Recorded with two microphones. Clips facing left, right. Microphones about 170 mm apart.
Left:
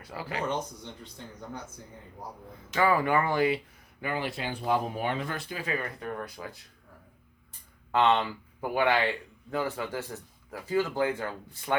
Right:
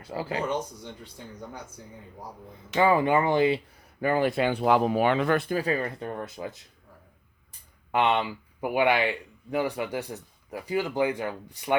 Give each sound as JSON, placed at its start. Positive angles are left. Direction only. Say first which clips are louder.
{"t": 0.0, "sound": "speech", "louder": "right 4 dB", "side_deg": -30}
{"t": 2.7, "sound": "speech", "louder": "right 3 dB", "side_deg": -25}
{"t": 4.0, "sound": "speech", "louder": "right 9 dB", "side_deg": -45}
{"t": 5.5, "sound": "speech", "louder": "right 7 dB", "side_deg": -40}
{"t": 7.9, "sound": "speech", "louder": "even", "side_deg": -15}